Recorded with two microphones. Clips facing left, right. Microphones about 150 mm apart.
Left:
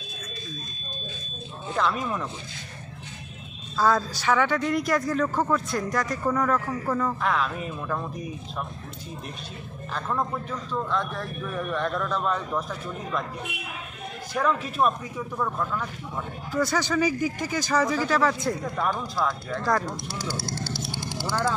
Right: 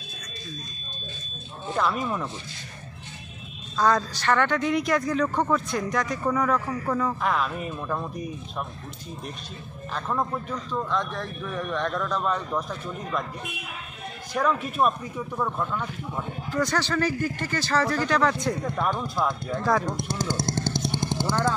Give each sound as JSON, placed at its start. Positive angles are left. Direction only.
{"t": 1.8, "sound": "speech", "side_deg": 0}
{"t": 3.7, "sound": "speech", "side_deg": 5}
{"t": 9.9, "sound": "speech", "side_deg": 0}
{"t": 14.3, "sound": "speech", "side_deg": 0}
{"t": 19.1, "sound": "speech", "side_deg": -20}
{"t": 20.2, "sound": "speech", "side_deg": -45}
{"t": 20.4, "sound": "vehicle", "side_deg": -20}